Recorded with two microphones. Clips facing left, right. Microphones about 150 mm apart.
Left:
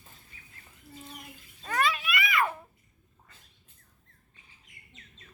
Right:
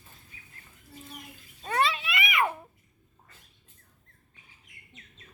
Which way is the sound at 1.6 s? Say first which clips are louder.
Right 2 dB; 25° right (ahead or behind).